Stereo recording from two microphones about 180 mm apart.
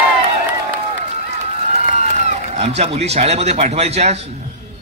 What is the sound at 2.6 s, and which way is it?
A man's voice, 35° right (ahead or behind).